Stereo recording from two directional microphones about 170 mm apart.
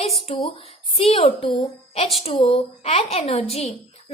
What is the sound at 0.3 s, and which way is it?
A woman's voice, 35° left (ahead or behind).